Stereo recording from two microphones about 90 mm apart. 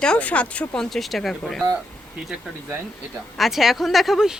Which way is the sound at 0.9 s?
Centre (ahead or behind).